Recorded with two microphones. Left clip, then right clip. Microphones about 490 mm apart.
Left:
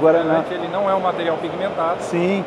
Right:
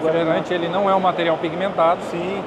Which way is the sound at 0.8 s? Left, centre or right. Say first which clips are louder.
Right 1 dB; centre.